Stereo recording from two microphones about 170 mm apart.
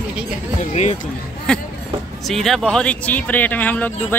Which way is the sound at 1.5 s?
5° left (ahead or behind).